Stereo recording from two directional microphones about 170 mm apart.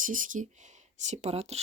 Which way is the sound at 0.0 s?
50° right (ahead or behind).